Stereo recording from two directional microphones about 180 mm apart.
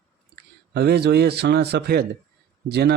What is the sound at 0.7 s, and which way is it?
Speech, 65° right (ahead or behind).